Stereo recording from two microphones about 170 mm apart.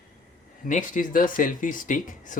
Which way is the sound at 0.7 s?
50° left (ahead or behind).